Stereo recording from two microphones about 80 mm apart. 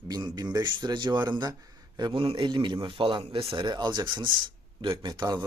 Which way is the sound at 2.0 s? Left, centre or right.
Right.